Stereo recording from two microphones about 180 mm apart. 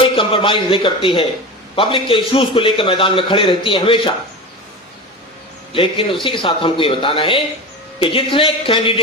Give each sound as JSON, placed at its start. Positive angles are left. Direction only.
{"t": 0.2, "sound": "a man's voice", "side_deg": 30}
{"t": 5.7, "sound": "a man's voice", "side_deg": 30}